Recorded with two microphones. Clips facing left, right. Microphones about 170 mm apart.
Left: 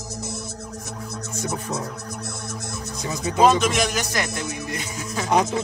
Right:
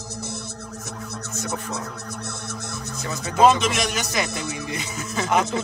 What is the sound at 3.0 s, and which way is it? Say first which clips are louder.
Music: even; 15° left (ahead or behind).